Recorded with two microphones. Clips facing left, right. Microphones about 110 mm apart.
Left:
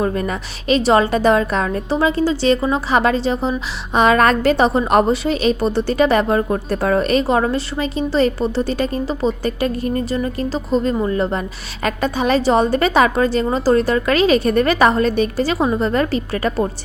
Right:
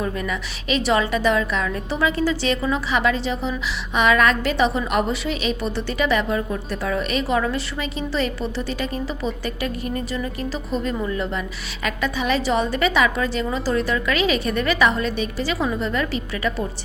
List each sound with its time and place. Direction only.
0.0 s a woman's voice: 40° left (ahead or behind)